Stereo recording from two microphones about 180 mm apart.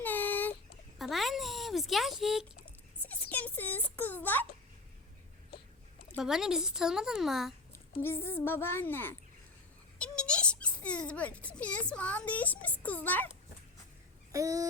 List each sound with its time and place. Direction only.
0.0 s a sound: 10° left (ahead or behind)
0.9 s speech: centre (ahead or behind)
3.0 s a child's voice: 10° left (ahead or behind)
6.1 s a woman's voice: centre (ahead or behind)
8.0 s a child's voice: 10° left (ahead or behind)
14.3 s chicken: 20° right (ahead or behind)